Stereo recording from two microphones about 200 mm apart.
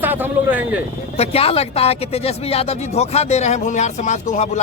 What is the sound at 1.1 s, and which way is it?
Speech, 30° left (ahead or behind).